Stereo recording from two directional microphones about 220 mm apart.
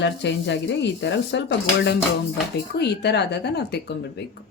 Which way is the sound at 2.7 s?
50° left (ahead or behind).